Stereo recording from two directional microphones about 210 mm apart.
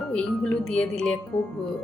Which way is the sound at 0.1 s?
5° left (ahead or behind).